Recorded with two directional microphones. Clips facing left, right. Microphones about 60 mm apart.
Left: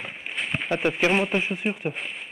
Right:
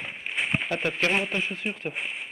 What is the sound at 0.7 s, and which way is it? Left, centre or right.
Speech, centre.